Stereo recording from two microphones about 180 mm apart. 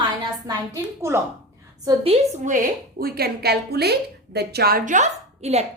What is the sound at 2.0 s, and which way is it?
Speech, 35° right (ahead or behind).